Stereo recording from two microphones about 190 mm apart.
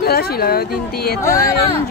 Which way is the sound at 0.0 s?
55° left (ahead or behind).